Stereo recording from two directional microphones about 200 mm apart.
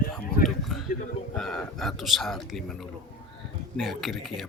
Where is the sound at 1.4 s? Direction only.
Centre (ahead or behind).